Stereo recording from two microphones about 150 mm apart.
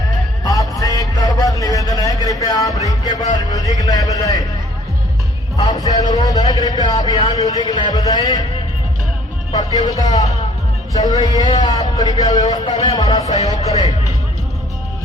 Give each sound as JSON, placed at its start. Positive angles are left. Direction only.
{"t": 0.4, "sound": "a sound", "side_deg": 25}
{"t": 2.4, "sound": "speech", "side_deg": 25}
{"t": 5.5, "sound": "speech", "side_deg": 25}
{"t": 9.5, "sound": "speech", "side_deg": 25}